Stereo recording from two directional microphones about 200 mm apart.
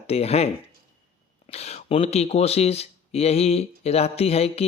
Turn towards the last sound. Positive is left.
turn(degrees=30)  # may be behind; listen again after turning